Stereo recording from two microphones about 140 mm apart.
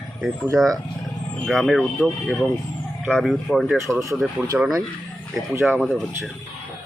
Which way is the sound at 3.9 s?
20° right (ahead or behind).